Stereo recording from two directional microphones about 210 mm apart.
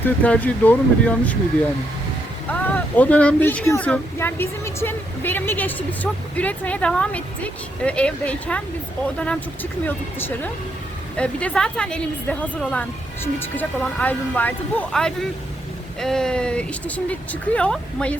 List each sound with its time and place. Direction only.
0.0 s speech: 5° left (ahead or behind)
2.5 s a woman's voice: 5° left (ahead or behind)